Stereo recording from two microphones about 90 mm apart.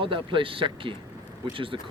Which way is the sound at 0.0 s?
70° right (ahead or behind).